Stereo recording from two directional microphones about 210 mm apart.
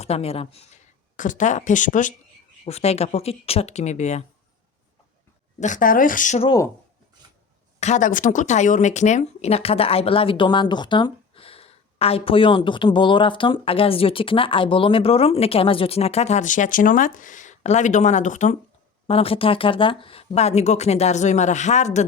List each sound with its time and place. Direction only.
0.0 s speech: 30° left (ahead or behind)
5.5 s speech: 35° left (ahead or behind)
7.8 s speech: 35° left (ahead or behind)